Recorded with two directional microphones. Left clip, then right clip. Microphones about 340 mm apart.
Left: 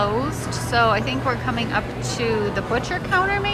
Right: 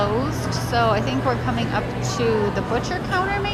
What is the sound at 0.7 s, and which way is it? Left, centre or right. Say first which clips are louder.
Speech: left 2 dB; centre.